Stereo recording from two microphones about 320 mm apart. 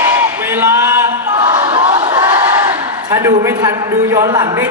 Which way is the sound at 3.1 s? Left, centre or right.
Centre.